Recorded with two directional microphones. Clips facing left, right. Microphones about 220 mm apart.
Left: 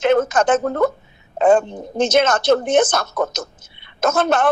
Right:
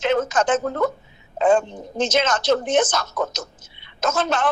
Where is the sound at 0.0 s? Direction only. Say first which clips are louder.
Left 4 dB; 55° left (ahead or behind).